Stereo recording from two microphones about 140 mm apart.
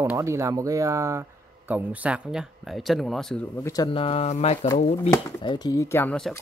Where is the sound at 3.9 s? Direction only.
40° left (ahead or behind).